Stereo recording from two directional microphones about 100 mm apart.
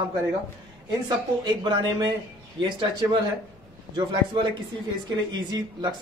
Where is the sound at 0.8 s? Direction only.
50° right (ahead or behind).